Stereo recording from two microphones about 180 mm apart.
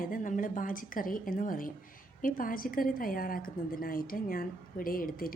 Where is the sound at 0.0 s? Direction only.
50° left (ahead or behind).